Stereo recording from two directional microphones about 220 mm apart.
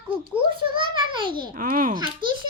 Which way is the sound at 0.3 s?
20° right (ahead or behind).